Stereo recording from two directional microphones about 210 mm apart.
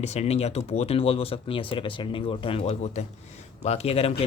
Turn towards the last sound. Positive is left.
turn(degrees=30)  # may be behind; listen again after turning